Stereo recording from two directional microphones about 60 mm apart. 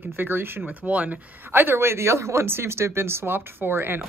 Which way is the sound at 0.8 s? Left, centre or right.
Right.